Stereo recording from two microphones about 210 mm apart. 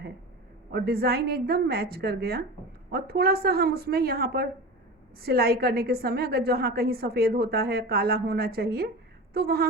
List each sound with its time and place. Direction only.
0.7 s a woman's voice: 45° right (ahead or behind)